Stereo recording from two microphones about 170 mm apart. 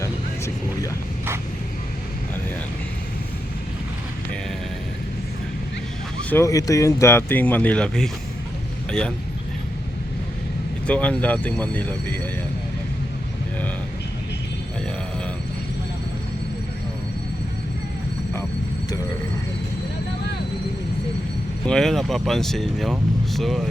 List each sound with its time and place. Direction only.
0.0 s vehicle: 20° left (ahead or behind)
6.3 s speech: 20° left (ahead or behind)
10.8 s speech: 5° left (ahead or behind)
21.7 s speech: centre (ahead or behind)